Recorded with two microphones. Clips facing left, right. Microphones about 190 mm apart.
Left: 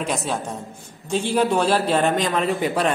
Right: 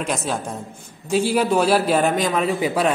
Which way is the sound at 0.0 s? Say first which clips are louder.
Right 1 dB; centre (ahead or behind).